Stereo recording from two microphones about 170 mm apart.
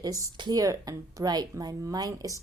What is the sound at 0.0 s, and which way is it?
Speech, 20° right (ahead or behind).